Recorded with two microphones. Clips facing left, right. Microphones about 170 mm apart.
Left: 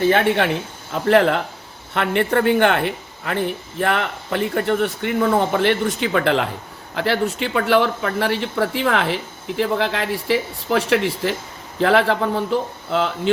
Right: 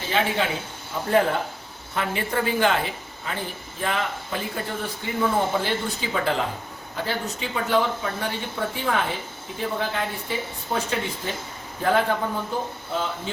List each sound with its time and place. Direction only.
0.0 s speech: 60° left (ahead or behind)
1.0 s speech: 85° left
1.9 s speech: 65° left (ahead or behind); by 13.3 s 80° left